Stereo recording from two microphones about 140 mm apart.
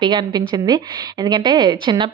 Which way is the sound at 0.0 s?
35° right (ahead or behind).